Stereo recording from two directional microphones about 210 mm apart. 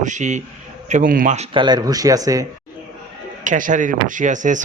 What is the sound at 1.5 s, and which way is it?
Speech, 20° right (ahead or behind).